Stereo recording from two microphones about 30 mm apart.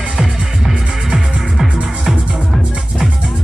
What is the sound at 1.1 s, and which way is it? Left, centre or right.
Music, right.